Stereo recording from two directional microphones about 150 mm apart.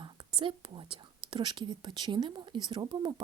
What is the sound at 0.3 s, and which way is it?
Speech, 35° right (ahead or behind).